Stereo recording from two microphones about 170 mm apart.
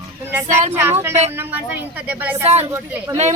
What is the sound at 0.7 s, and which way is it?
A woman's voice, 15° right (ahead or behind).